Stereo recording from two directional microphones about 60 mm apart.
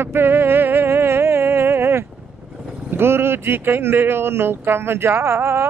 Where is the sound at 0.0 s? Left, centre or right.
Right.